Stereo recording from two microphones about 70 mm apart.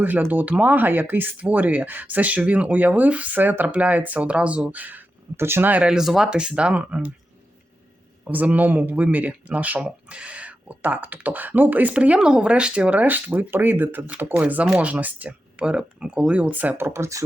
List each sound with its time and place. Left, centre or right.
0.3 s speech: right
5.4 s speech: right
5.8 s speech: centre
8.5 s speech: right